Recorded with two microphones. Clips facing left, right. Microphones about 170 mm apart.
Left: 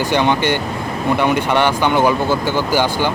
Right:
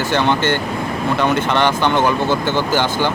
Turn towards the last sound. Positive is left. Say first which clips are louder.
# left 1 dB
turn(degrees=10)  # may be behind; listen again after turning